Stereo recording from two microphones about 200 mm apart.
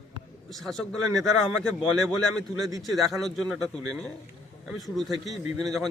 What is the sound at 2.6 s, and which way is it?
Speech, 15° right (ahead or behind).